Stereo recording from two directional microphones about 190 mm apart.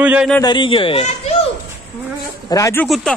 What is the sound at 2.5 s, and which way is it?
Speech, 15° left (ahead or behind).